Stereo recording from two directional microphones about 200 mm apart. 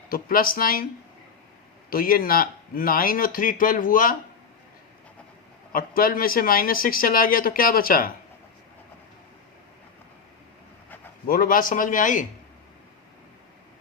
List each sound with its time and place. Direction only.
0.1 s speech: 45° left (ahead or behind)
1.9 s speech: 45° left (ahead or behind)
5.7 s speech: 45° left (ahead or behind)
11.3 s speech: 45° left (ahead or behind)